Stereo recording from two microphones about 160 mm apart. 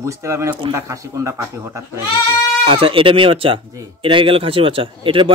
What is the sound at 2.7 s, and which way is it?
Speech, 35° right (ahead or behind).